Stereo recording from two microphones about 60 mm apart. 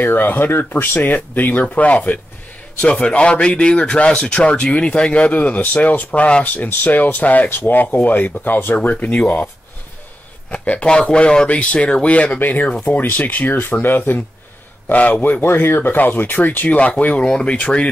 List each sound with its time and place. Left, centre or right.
0.0 s speech: left
6.5 s speech: left
10.5 s speech: left
15.4 s speech: left